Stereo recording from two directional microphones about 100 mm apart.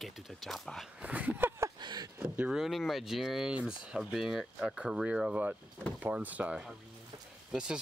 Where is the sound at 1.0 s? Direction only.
15° right (ahead or behind).